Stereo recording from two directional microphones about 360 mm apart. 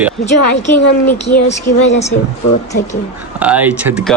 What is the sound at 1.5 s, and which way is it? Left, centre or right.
Speech, centre.